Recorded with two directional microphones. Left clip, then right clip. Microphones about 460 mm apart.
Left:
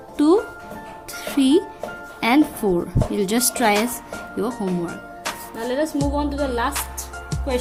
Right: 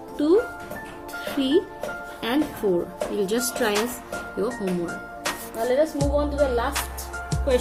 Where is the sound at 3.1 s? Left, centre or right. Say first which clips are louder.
Left 2 dB; centre.